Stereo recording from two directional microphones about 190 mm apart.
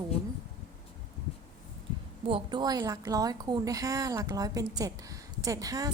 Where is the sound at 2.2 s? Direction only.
25° right (ahead or behind).